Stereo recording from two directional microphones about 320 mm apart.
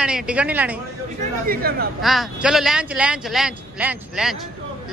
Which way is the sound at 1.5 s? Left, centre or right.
Right.